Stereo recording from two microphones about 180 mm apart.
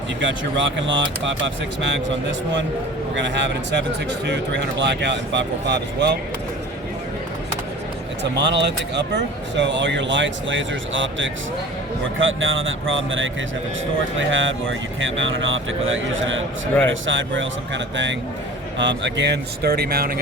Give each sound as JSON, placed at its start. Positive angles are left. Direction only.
{"t": 0.2, "sound": "a man's voice", "side_deg": -90}
{"t": 3.2, "sound": "speech", "side_deg": -80}
{"t": 8.2, "sound": "a man's voice", "side_deg": -75}